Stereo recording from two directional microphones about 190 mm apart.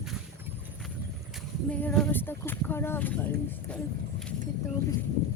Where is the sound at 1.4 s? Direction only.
5° left (ahead or behind).